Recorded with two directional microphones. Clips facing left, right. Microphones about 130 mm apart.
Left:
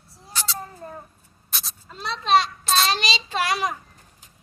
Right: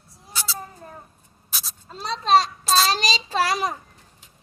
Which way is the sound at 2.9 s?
40° right (ahead or behind).